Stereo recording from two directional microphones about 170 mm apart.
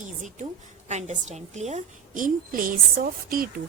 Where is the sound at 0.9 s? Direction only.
40° right (ahead or behind).